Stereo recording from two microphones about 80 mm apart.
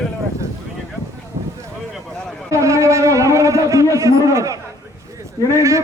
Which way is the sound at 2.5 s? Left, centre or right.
Right.